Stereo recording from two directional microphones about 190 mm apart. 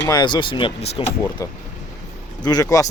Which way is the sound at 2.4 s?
20° left (ahead or behind).